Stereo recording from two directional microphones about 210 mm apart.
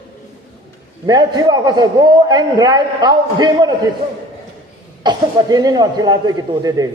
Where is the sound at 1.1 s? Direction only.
20° right (ahead or behind).